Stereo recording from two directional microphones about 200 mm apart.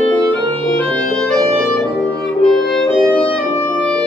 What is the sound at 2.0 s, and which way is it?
Music, 5° left (ahead or behind).